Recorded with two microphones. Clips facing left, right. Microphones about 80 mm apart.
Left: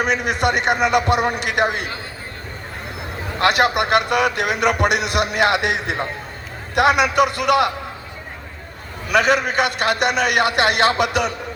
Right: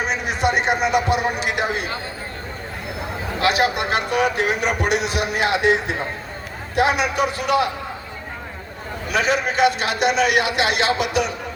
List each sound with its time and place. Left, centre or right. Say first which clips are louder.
0.0 s a man's voice: left 2 dB; left
3.4 s a man's voice: left 3 dB; left
9.0 s a man's voice: left 4 dB; left